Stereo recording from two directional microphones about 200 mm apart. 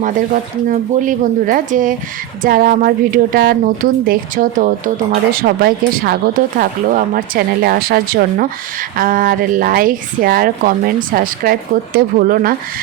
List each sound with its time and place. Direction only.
0.7 s a woman's voice: 40° right (ahead or behind)